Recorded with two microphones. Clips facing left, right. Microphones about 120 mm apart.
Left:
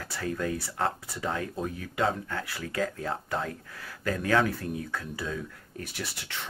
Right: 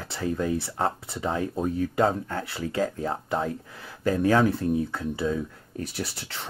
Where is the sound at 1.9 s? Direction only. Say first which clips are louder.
Right 2 dB; 35° right (ahead or behind).